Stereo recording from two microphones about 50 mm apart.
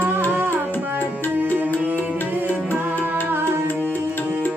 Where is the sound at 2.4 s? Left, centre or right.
Left.